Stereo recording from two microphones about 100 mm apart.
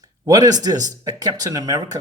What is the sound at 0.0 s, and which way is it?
A man's voice, 40° right (ahead or behind).